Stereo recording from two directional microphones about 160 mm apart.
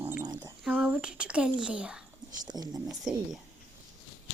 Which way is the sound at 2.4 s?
25° right (ahead or behind).